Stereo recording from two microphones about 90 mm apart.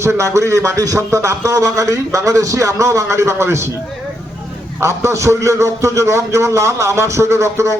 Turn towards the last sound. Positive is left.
turn(degrees=-35)  # may be behind; listen again after turning